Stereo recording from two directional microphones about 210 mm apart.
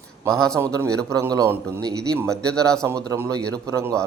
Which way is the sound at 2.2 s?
5° left (ahead or behind).